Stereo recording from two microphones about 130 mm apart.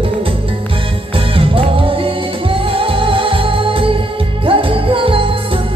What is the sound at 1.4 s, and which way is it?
Music, 45° right (ahead or behind).